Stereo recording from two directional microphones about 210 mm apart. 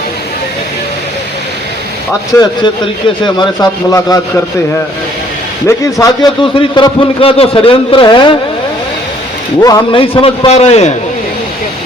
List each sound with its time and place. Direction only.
3.2 s a man's voice: 20° left (ahead or behind)
5.6 s a man's voice: 15° left (ahead or behind)
9.6 s a man's voice: 15° left (ahead or behind)